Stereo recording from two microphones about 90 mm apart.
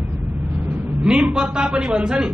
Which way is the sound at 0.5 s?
20° right (ahead or behind).